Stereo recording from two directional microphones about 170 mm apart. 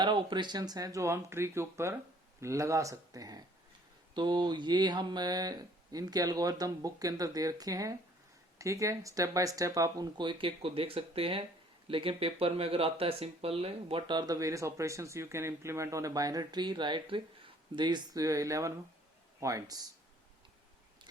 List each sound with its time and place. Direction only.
0.0 s speech: 25° right (ahead or behind)